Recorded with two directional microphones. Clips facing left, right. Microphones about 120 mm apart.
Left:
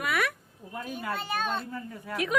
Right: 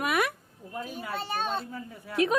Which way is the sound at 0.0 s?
20° right (ahead or behind).